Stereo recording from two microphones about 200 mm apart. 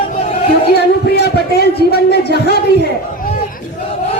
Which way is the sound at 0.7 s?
55° left (ahead or behind).